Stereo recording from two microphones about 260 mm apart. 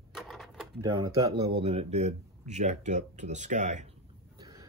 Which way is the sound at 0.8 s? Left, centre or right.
Centre.